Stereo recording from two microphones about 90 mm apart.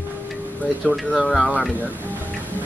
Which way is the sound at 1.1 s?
Centre (ahead or behind).